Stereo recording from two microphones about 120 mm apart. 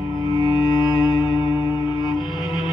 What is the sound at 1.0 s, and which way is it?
Music, 40° left (ahead or behind).